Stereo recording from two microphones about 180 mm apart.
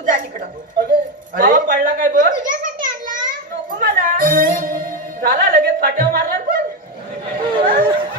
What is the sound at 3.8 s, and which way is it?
Music, 50° right (ahead or behind).